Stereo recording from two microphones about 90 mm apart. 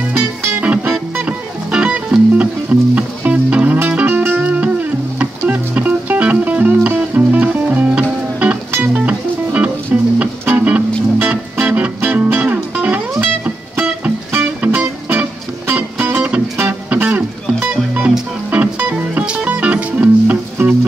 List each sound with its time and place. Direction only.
0.1 s music: 30° right (ahead or behind)
0.6 s music: 20° right (ahead or behind)